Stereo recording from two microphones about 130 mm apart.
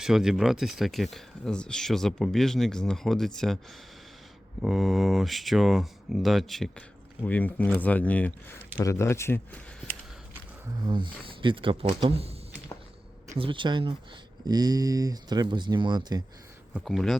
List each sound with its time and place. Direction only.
0.0 s speech: 5° right (ahead or behind)
4.6 s speech: centre (ahead or behind)
7.2 s speech: 15° left (ahead or behind)
8.8 s speech: 25° left (ahead or behind)
10.8 s speech: 35° right (ahead or behind)
13.4 s speech: 40° right (ahead or behind)
16.8 s speech: centre (ahead or behind)